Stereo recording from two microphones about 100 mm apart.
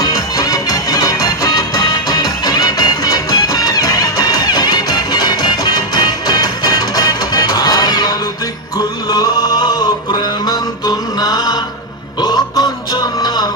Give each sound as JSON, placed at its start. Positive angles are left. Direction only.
{"t": 0.0, "sound": "music", "side_deg": 40}